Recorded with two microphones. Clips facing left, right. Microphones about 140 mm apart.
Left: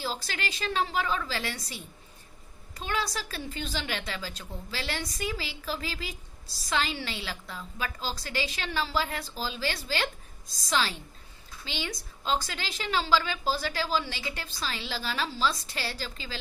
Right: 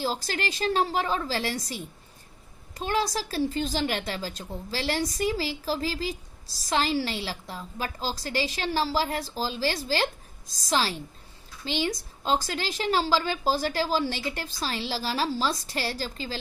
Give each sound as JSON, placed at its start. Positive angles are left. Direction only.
{"t": 0.0, "sound": "a woman's voice", "side_deg": -40}